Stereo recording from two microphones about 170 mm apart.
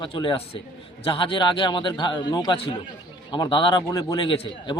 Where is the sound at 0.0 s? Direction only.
30° left (ahead or behind).